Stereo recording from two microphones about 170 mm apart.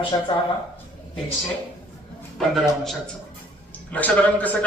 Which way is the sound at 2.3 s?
Centre (ahead or behind).